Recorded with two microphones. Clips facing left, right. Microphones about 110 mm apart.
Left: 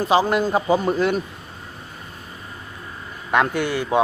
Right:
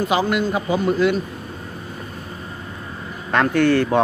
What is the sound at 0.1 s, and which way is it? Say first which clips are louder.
A man's voice: left 5 dB; 35° left (ahead or behind).